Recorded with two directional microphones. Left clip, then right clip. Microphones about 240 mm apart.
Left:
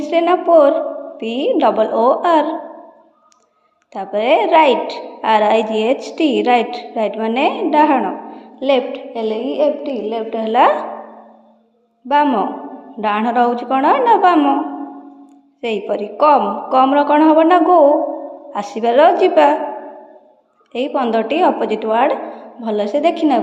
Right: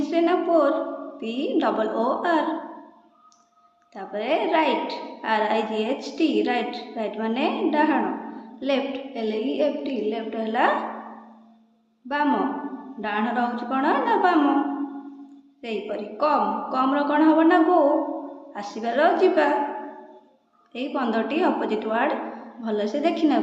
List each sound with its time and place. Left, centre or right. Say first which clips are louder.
0.0 s a woman's voice: left 7 dB; left
3.9 s a woman's voice: left 11 dB; left
12.0 s a woman's voice: left 9 dB; left
15.6 s a woman's voice: left 10 dB; left
20.7 s a woman's voice: left 9 dB; left